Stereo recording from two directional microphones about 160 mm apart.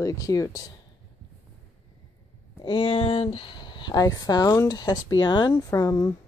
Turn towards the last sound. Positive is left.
turn(degrees=20)  # may be behind; listen again after turning